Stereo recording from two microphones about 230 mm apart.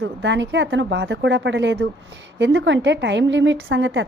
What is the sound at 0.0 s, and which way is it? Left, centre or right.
A woman's voice, right.